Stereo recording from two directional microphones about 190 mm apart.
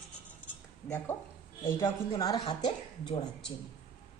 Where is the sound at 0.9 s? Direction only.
10° left (ahead or behind).